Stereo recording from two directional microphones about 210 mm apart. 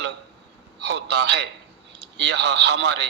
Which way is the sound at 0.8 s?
55° right (ahead or behind).